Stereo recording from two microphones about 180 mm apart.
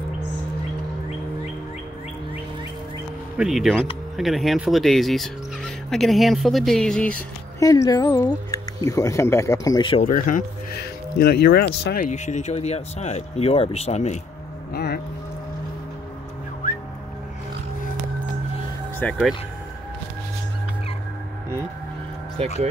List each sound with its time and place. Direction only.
3.3 s speech: centre (ahead or behind)
7.6 s speech: 20° left (ahead or behind); by 12.1 s 60° left (ahead or behind)
12.1 s speech: 40° left (ahead or behind)
14.7 s speech: 60° left (ahead or behind)
19.0 s speech: 10° left (ahead or behind)